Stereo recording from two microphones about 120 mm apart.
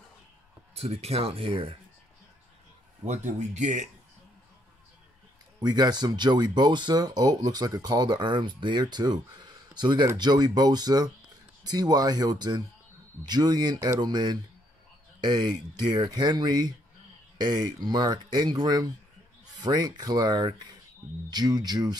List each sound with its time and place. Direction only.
0.7 s speech: 55° right (ahead or behind)
3.1 s speech: 85° right
5.6 s speech: 35° right (ahead or behind)